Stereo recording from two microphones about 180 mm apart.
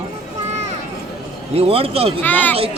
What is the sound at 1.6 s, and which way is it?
Speech, 30° right (ahead or behind).